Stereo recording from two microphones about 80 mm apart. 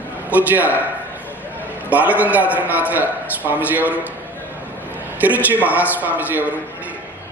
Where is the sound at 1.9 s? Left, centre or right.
Right.